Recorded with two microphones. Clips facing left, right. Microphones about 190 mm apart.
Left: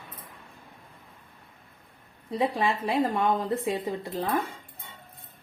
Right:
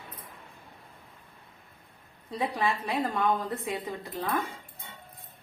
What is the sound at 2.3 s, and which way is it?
A woman's voice, 25° left (ahead or behind).